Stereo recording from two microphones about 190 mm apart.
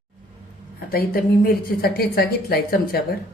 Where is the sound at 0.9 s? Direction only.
50° left (ahead or behind).